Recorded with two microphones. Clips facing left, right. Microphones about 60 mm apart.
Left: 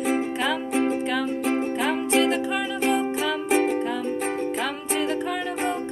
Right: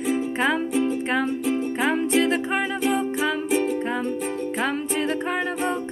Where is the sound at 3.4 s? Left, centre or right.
Left.